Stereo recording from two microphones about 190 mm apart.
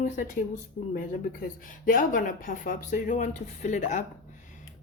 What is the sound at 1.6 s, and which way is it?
Speech, 45° left (ahead or behind).